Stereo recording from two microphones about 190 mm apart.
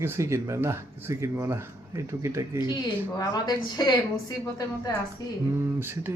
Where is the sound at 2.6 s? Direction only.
25° left (ahead or behind).